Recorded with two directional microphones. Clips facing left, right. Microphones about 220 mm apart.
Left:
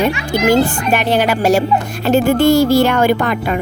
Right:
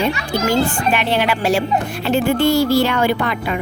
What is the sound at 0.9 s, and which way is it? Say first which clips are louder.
A woman's voice: left 4 dB; 45° left (ahead or behind).